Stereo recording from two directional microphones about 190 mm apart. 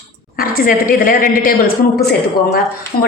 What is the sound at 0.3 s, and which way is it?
A woman's voice, 50° left (ahead or behind).